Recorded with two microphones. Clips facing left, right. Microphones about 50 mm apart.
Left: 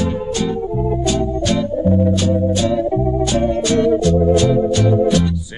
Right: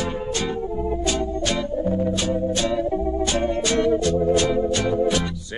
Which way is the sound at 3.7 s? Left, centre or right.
Right.